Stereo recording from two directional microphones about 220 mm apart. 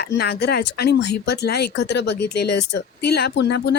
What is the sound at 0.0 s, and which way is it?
Speech, 45° left (ahead or behind).